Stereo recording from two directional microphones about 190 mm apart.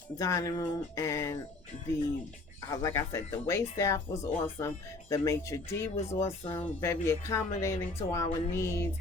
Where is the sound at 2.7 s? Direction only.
15° left (ahead or behind).